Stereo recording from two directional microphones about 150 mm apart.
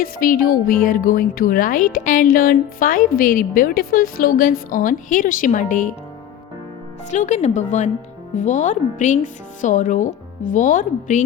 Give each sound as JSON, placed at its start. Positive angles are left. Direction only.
{"t": 0.0, "sound": "speech", "side_deg": 70}
{"t": 7.1, "sound": "speech", "side_deg": 50}